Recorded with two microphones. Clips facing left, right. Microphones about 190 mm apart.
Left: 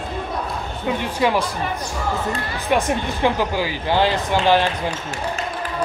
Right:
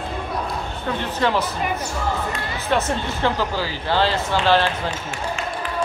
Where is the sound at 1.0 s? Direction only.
10° left (ahead or behind).